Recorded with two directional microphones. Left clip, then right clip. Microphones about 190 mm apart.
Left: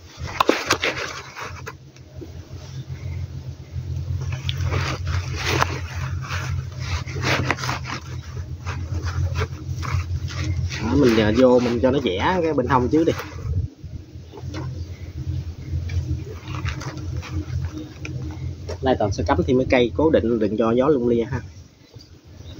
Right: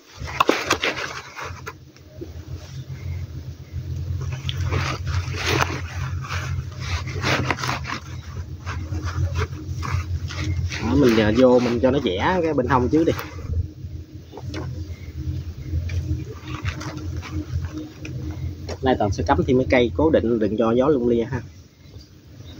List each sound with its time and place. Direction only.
0.2 s dog: 10° right (ahead or behind)
4.5 s a sound: 10° right (ahead or behind)
5.9 s a sound: 5° right (ahead or behind)
6.8 s dog: 15° right (ahead or behind)
9.0 s dog: 5° right (ahead or behind)
11.5 s speech: 15° right (ahead or behind)
11.8 s speech: centre (ahead or behind)
18.8 s speech: 15° right (ahead or behind); by 21.5 s centre (ahead or behind)